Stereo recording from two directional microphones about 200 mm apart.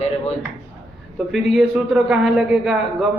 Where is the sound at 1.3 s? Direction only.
Centre (ahead or behind).